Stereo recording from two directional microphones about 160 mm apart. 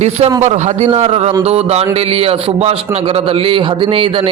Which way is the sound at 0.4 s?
45° right (ahead or behind).